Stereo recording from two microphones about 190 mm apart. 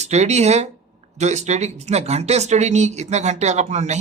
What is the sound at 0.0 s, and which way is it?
A man's voice, 35° right (ahead or behind).